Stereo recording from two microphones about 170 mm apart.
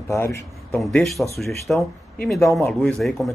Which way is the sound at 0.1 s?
15° left (ahead or behind).